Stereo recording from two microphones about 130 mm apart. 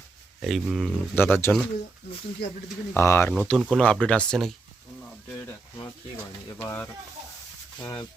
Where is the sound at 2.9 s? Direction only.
20° left (ahead or behind).